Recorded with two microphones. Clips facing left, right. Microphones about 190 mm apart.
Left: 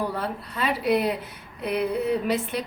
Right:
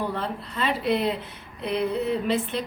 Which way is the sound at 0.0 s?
10° left (ahead or behind).